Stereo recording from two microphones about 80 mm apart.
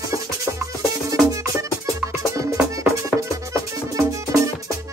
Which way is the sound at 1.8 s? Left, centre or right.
Right.